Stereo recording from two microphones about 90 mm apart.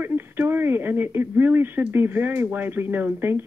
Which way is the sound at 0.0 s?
25° right (ahead or behind).